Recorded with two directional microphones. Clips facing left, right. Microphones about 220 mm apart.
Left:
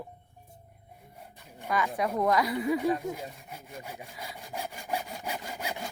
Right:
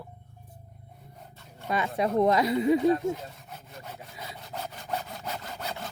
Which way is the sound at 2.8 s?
10° left (ahead or behind).